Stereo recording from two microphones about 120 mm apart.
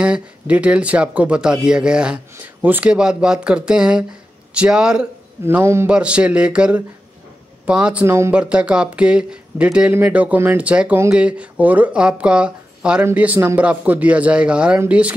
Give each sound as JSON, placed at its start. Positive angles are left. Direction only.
{"t": 0.0, "sound": "speech", "side_deg": -10}
{"t": 5.4, "sound": "a man's voice", "side_deg": -20}
{"t": 5.9, "sound": "speech", "side_deg": -10}